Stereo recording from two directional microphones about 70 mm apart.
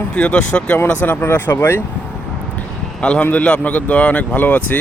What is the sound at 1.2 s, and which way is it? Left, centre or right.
Speech, left.